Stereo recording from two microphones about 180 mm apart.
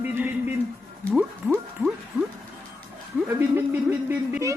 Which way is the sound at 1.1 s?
5° right (ahead or behind).